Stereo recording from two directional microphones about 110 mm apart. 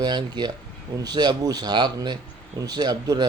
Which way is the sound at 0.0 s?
40° right (ahead or behind).